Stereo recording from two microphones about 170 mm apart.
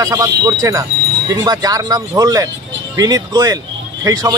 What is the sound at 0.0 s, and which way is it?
Speech, 20° right (ahead or behind).